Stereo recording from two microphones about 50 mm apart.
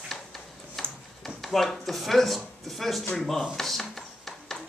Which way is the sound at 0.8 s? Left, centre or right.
Centre.